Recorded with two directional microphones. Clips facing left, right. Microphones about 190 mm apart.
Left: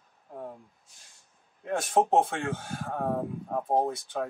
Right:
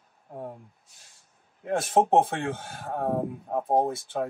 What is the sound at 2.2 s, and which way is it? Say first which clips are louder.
Speech: right 2 dB; 5° right (ahead or behind).